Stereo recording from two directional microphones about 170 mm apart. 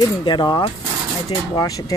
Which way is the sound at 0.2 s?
25° left (ahead or behind).